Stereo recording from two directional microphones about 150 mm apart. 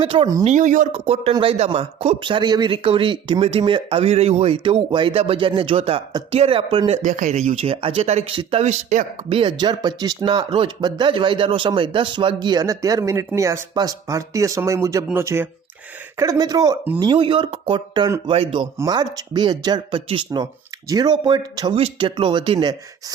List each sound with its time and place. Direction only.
0.0 s speech: 40° right (ahead or behind)
0.4 s speech: 55° right (ahead or behind)
1.0 s speech: 40° right (ahead or behind)
9.3 s speech: 30° right (ahead or behind)
18.8 s speech: 25° right (ahead or behind)